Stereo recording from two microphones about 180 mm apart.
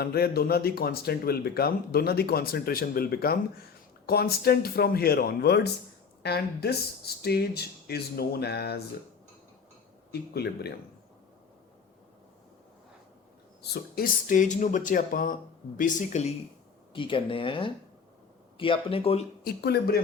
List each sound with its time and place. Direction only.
0.0 s speech: 60° left (ahead or behind)
10.1 s speech: 60° left (ahead or behind)
13.6 s speech: 60° left (ahead or behind); by 16.3 s 40° left (ahead or behind)
16.9 s speech: 30° left (ahead or behind)
19.5 s speech: 60° left (ahead or behind)